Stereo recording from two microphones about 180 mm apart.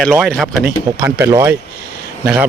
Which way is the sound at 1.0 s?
15° right (ahead or behind).